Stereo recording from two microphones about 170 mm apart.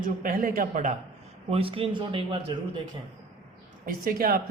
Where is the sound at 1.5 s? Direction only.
30° right (ahead or behind).